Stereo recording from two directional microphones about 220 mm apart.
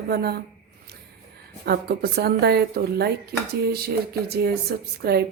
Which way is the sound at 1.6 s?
45° right (ahead or behind).